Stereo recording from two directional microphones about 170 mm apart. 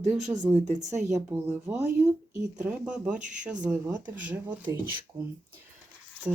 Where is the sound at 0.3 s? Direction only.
20° right (ahead or behind).